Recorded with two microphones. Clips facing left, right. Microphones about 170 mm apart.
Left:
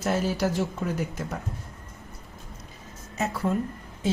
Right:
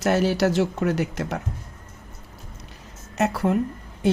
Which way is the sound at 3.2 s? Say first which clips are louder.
Right 5 dB; 70° right (ahead or behind).